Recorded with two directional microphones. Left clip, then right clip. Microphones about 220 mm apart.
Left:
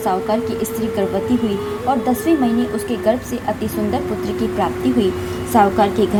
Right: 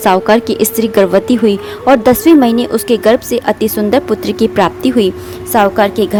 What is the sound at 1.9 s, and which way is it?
A woman's voice, 50° right (ahead or behind).